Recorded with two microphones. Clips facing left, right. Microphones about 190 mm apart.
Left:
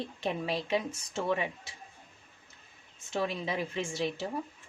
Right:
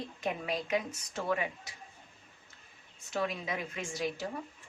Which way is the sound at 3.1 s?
25° left (ahead or behind).